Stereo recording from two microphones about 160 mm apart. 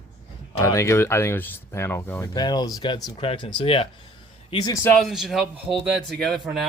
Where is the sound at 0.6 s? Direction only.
20° left (ahead or behind).